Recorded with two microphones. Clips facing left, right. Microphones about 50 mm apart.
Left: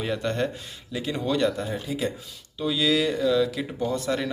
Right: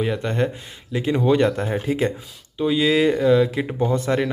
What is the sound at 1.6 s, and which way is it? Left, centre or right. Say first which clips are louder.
Speech: right 6 dB; right.